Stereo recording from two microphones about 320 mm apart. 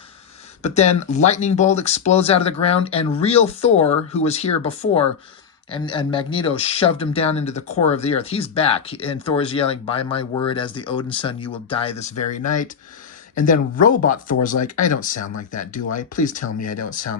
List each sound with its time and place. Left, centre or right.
0.6 s speech: centre
13.3 s speech: left